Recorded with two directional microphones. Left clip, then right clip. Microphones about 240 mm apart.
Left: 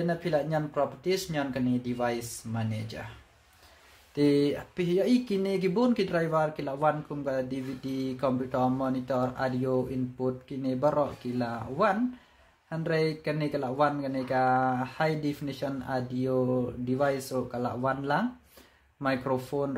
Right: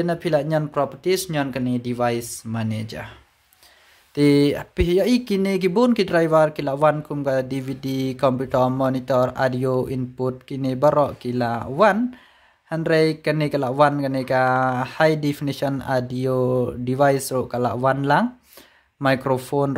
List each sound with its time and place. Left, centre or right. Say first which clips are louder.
0.0 s speech: right 7 dB; right
4.1 s speech: right 8 dB; right